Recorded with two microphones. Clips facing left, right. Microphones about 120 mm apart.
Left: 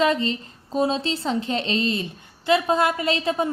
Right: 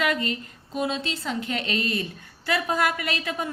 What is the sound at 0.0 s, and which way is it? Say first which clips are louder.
A woman's voice: left 5 dB; 25° left (ahead or behind).